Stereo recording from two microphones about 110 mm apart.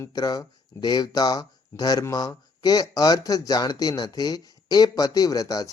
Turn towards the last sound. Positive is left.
turn(degrees=35)  # may be behind; listen again after turning